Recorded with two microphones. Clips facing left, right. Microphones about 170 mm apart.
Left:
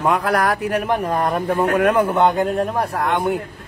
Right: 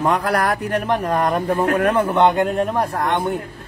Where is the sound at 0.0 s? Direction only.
5° left (ahead or behind).